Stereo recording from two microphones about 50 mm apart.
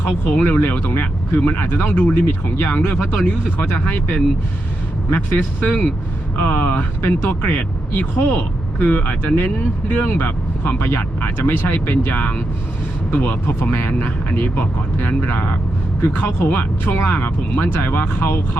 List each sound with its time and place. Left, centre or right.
0.0 s speech: left
0.6 s speech: left
8.1 s speech: left
8.8 s speech: left